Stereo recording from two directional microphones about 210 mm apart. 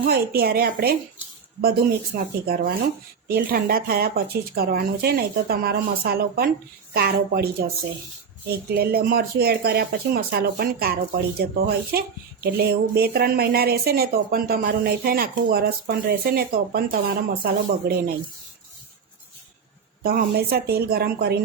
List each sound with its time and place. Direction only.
0.0 s speech: 45° right (ahead or behind)
2.1 s speech: 45° right (ahead or behind)
20.0 s speech: 45° right (ahead or behind)